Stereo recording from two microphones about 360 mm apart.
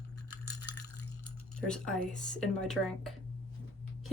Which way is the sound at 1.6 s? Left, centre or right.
Centre.